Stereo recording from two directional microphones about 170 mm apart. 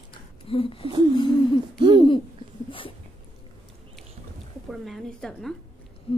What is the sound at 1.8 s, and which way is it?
Hoot, 25° right (ahead or behind).